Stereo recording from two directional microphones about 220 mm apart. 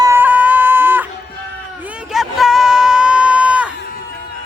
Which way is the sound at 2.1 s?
Centre (ahead or behind).